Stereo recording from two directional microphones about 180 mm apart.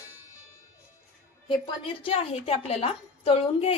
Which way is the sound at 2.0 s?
30° left (ahead or behind).